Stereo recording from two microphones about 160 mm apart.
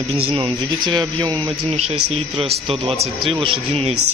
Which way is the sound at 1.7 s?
40° right (ahead or behind).